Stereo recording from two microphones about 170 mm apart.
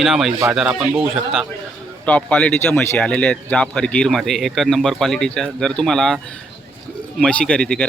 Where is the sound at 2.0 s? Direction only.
5° left (ahead or behind).